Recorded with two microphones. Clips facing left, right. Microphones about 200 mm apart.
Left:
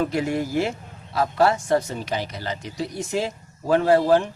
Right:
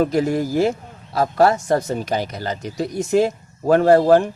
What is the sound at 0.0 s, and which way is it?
Speech, 40° right (ahead or behind).